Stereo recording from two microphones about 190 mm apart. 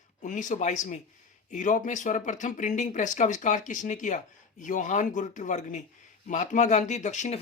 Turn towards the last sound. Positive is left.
turn(degrees=40)  # may be behind; listen again after turning